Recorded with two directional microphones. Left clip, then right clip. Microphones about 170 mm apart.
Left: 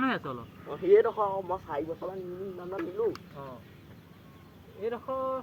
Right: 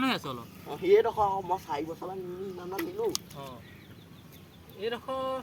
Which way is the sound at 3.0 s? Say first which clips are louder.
Left 1 dB; 30° right (ahead or behind).